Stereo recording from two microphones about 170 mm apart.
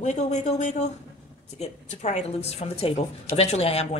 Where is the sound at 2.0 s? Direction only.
40° left (ahead or behind).